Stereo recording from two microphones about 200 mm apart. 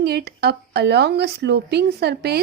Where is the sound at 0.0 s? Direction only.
55° right (ahead or behind).